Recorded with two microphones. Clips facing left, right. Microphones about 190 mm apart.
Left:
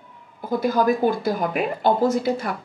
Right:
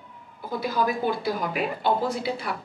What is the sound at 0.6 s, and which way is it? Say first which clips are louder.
Speech: left 6 dB; 45° left (ahead or behind).